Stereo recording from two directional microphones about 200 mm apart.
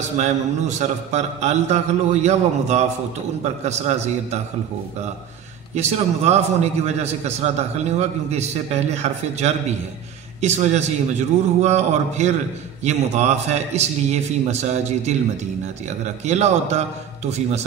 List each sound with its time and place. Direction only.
0.0 s a man's voice: 35° right (ahead or behind)
5.8 s a man's voice: 35° right (ahead or behind)
16.3 s a man's voice: 35° right (ahead or behind)